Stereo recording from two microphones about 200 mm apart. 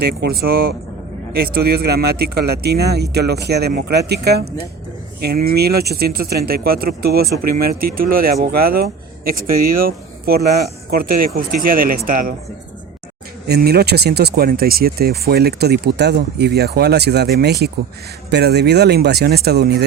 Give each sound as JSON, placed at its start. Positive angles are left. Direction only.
{"t": 0.0, "sound": "speech", "side_deg": -50}
{"t": 13.5, "sound": "speech", "side_deg": -50}